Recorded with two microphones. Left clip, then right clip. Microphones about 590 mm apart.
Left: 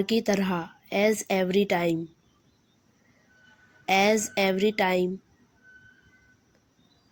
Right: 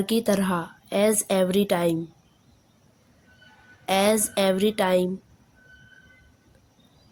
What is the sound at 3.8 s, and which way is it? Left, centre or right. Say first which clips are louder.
A woman's voice: right 1 dB; right.